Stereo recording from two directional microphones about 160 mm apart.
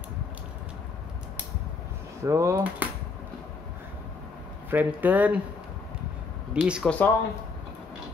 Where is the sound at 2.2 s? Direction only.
20° right (ahead or behind).